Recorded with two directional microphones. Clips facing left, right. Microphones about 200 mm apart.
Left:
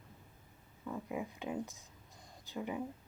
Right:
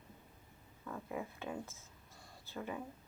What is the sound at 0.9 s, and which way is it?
Speech, 15° left (ahead or behind).